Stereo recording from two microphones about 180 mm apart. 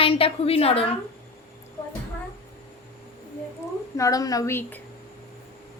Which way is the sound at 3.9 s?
20° left (ahead or behind).